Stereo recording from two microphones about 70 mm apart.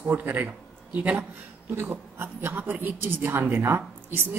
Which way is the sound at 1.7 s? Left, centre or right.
Right.